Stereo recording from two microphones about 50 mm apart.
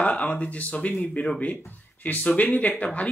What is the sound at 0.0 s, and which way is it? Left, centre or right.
Speech, left.